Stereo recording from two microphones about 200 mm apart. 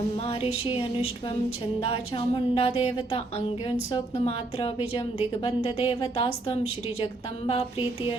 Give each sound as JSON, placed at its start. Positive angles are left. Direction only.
{"t": 0.3, "sound": "a woman's voice", "side_deg": 30}
{"t": 1.8, "sound": "a woman's voice", "side_deg": 25}